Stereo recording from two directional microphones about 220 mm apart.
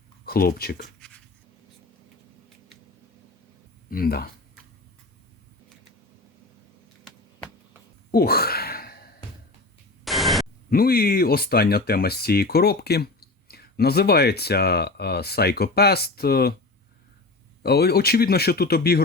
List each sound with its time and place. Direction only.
0.3 s speech: 45° left (ahead or behind)
3.8 s speech: 40° left (ahead or behind)
7.1 s a sound: centre (ahead or behind)
8.1 s a sound: 45° left (ahead or behind)
10.0 s static: centre (ahead or behind)
10.7 s speech: 40° left (ahead or behind)
17.6 s speech: 45° left (ahead or behind)